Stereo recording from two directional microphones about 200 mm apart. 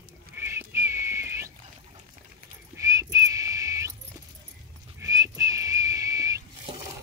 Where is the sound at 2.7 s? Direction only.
15° right (ahead or behind).